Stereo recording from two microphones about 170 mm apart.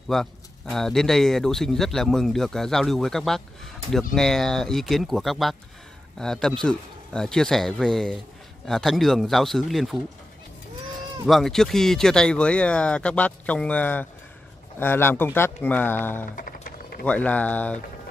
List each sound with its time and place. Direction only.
0.1 s speech: centre (ahead or behind)
11.2 s speech: centre (ahead or behind)
16.3 s run: 55° left (ahead or behind)
17.0 s speech: 10° left (ahead or behind)